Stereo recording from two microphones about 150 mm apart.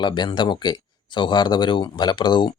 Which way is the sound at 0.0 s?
30° left (ahead or behind).